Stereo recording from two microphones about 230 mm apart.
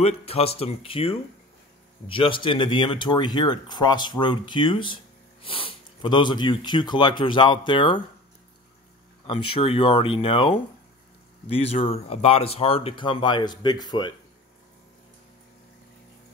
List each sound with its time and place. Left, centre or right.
0.0 s speech: left
9.6 s speech: left